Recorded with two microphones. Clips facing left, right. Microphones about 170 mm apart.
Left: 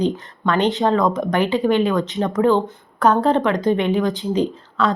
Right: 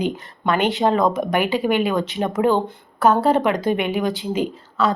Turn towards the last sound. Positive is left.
turn(degrees=-5)  # may be behind; listen again after turning